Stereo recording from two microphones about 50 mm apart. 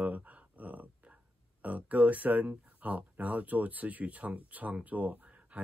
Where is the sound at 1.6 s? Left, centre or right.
Right.